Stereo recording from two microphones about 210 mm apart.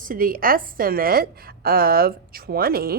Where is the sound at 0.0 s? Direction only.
40° right (ahead or behind).